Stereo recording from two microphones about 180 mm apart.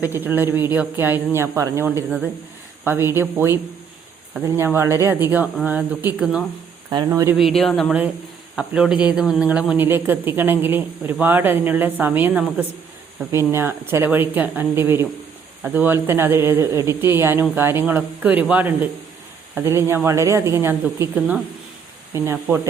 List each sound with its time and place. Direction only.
0.0 s speech: 10° right (ahead or behind)
6.9 s speech: 20° right (ahead or behind)
7.3 s speech: centre (ahead or behind)